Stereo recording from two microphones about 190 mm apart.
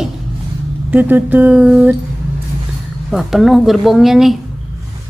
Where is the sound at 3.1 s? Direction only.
Centre (ahead or behind).